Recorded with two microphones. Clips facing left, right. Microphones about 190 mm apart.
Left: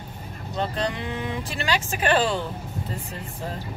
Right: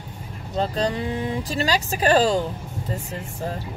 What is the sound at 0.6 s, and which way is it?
Speech, 35° right (ahead or behind).